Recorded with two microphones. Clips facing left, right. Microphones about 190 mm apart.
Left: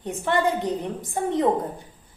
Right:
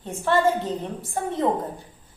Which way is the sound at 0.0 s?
15° left (ahead or behind).